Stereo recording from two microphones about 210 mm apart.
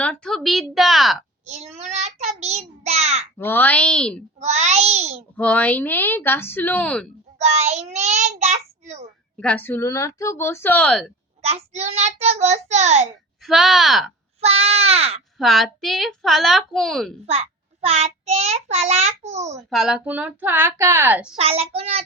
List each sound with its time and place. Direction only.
0.0 s a woman's voice: 5° left (ahead or behind)
1.5 s child singing: 30° right (ahead or behind)
3.3 s a woman's voice: 10° left (ahead or behind)
4.4 s child singing: 30° right (ahead or behind)
5.4 s a woman's voice: 5° left (ahead or behind)
7.3 s child singing: 30° right (ahead or behind)
9.4 s a woman's voice: 5° left (ahead or behind)
11.4 s child singing: 30° right (ahead or behind)
13.4 s a woman's voice: centre (ahead or behind)
14.4 s speech: 30° right (ahead or behind)
15.4 s a woman's voice: centre (ahead or behind)
17.2 s child singing: 30° right (ahead or behind)
19.7 s a woman's voice: centre (ahead or behind)
21.3 s speech: 30° right (ahead or behind)